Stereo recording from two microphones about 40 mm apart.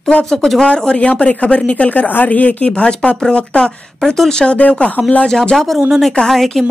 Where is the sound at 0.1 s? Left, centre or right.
Centre.